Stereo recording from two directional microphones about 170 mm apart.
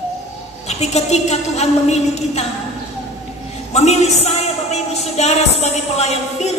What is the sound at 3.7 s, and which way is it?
A woman's voice, 40° left (ahead or behind).